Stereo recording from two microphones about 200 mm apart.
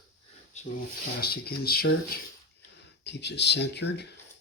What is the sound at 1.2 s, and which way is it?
Speech, 50° left (ahead or behind).